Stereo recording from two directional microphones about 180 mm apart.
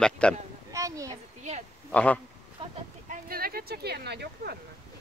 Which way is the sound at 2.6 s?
30° right (ahead or behind).